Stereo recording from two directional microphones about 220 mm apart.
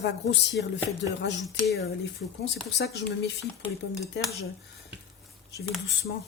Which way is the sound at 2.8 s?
50° left (ahead or behind).